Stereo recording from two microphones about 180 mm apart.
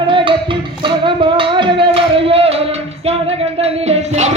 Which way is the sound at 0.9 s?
25° right (ahead or behind).